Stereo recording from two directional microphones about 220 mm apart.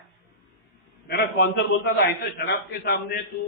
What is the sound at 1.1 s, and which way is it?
A man's voice, 50° left (ahead or behind).